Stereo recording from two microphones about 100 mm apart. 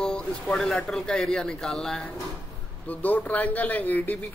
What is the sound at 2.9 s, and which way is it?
Speech, 15° left (ahead or behind).